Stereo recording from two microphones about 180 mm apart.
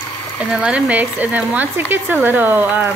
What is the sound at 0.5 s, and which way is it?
A woman's voice, 5° right (ahead or behind).